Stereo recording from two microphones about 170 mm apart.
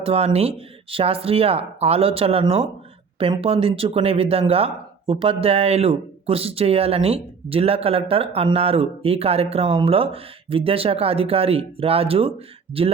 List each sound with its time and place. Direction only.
0.0 s speech: 35° right (ahead or behind)